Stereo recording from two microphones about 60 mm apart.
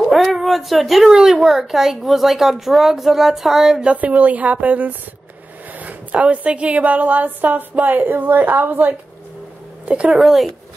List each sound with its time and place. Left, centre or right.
0.1 s a child's voice: centre
3.7 s a woman's voice: centre
10.1 s a child's voice: centre